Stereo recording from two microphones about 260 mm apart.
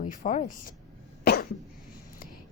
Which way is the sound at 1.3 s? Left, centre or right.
Left.